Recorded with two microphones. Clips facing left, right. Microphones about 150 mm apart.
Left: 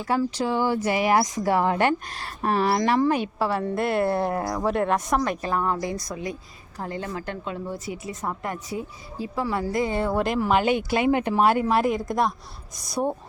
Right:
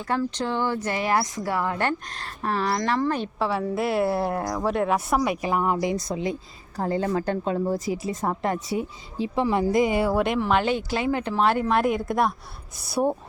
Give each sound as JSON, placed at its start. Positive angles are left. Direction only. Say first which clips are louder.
{"t": 0.0, "sound": "speech", "louder": "left 2 dB", "side_deg": 10}
{"t": 1.9, "sound": "a woman's voice", "louder": "left 3 dB", "side_deg": 10}